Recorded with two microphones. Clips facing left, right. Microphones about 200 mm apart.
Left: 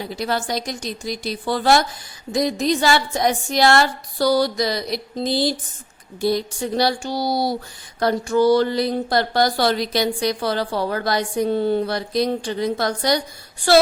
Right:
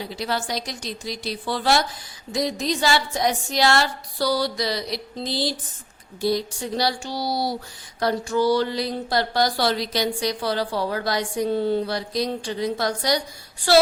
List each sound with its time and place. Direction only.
0.2 s speech: 50° left (ahead or behind)